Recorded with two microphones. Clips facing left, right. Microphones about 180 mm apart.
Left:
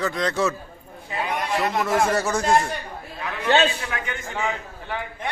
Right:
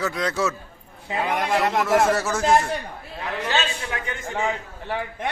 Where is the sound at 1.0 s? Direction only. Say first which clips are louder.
Right 3 dB; 75° right (ahead or behind).